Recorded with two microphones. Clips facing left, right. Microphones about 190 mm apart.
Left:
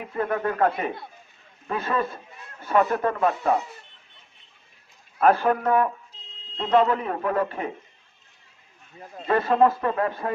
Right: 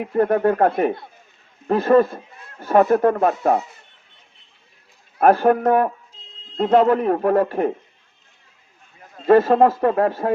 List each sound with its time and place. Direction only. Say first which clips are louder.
0.0 s a man's voice: right 9 dB; 50° right (ahead or behind)
5.2 s a man's voice: right 5 dB; 45° right (ahead or behind)
9.2 s a man's voice: right 6 dB; 45° right (ahead or behind)